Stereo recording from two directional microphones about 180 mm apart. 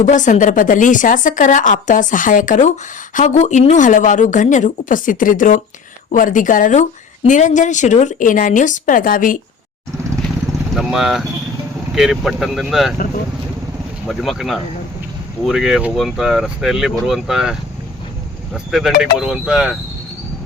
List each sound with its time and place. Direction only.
0.0 s a woman's voice: 45° left (ahead or behind)
10.8 s speech: centre (ahead or behind)
14.1 s speech: centre (ahead or behind)